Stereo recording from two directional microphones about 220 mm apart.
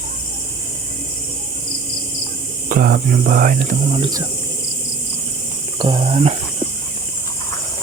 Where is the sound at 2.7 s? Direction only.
40° right (ahead or behind).